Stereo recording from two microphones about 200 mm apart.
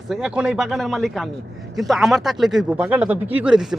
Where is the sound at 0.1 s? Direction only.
5° right (ahead or behind).